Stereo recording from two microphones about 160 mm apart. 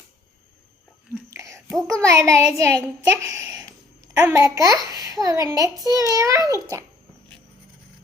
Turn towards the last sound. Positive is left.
turn(degrees=-20)  # may be behind; listen again after turning